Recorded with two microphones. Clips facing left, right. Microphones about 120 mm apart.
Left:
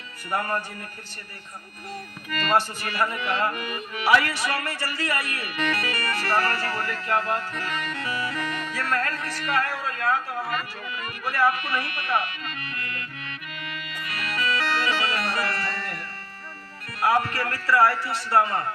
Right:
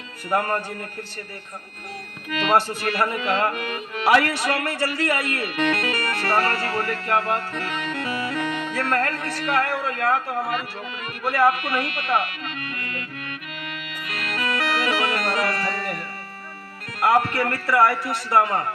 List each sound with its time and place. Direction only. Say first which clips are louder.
0.3 s speech: right 4 dB; 60° right (ahead or behind)
2.4 s speech: right 3 dB; 65° right (ahead or behind)
7.7 s music: right 2 dB; centre (ahead or behind)
7.9 s music: right 3 dB; 65° right (ahead or behind)
8.9 s a man's voice: right 3 dB; 60° right (ahead or behind)
12.5 s accordion: right 3 dB; 60° right (ahead or behind)
13.7 s music: right 1 dB; 65° right (ahead or behind)
14.6 s music: right 2 dB; 5° right (ahead or behind)
14.8 s music: right 3 dB; 65° right (ahead or behind)
17.0 s speech: right 4 dB; 65° right (ahead or behind)